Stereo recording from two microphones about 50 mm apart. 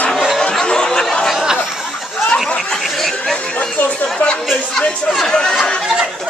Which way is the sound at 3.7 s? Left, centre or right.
Left.